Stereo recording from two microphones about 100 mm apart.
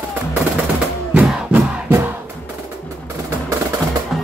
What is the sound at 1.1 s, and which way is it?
Music, 15° right (ahead or behind).